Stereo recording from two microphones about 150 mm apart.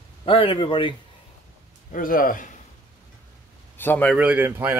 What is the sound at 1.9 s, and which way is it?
Speech, 70° left (ahead or behind).